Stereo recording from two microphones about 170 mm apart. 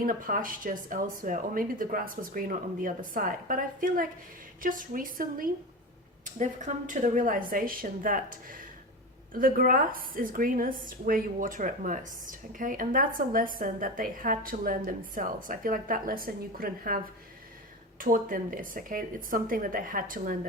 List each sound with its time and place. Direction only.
0.0 s a woman's voice: 55° right (ahead or behind)
18.0 s speech: 50° right (ahead or behind)